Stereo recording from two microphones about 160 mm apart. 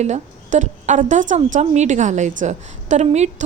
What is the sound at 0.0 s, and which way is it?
A woman's voice, 45° right (ahead or behind).